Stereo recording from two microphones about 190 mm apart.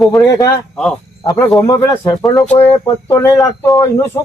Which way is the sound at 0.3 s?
15° left (ahead or behind).